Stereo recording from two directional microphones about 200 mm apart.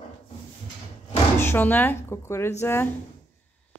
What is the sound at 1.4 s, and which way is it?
Speech, 10° left (ahead or behind).